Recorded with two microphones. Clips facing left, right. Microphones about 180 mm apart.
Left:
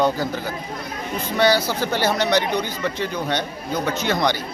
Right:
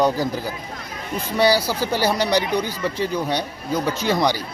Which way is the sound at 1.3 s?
10° right (ahead or behind).